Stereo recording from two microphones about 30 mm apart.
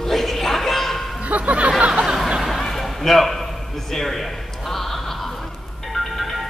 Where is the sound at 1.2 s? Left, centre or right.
Right.